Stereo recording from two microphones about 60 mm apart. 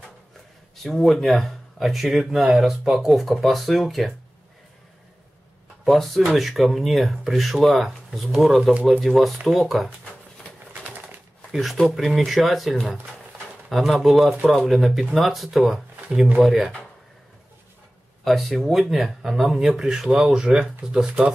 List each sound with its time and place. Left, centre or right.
0.8 s speech: centre
5.9 s speech: centre
9.8 s a sound: centre
10.7 s a sound: right
11.9 s speech: centre
16.1 s speech: centre
16.3 s speech: centre
18.2 s speech: centre